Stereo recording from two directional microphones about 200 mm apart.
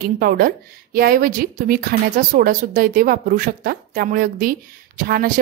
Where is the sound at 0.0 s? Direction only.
50° right (ahead or behind).